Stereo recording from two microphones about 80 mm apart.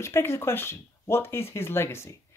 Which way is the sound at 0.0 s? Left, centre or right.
Left.